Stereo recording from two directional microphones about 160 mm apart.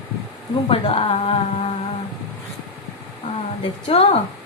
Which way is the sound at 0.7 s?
40° left (ahead or behind).